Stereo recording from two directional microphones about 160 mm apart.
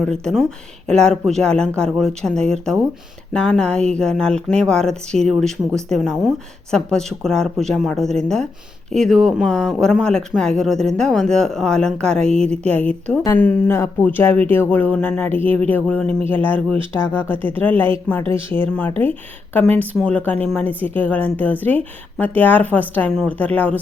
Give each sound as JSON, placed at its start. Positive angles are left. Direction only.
{"t": 0.0, "sound": "a woman's voice", "side_deg": 5}
{"t": 20.0, "sound": "a woman's voice", "side_deg": 5}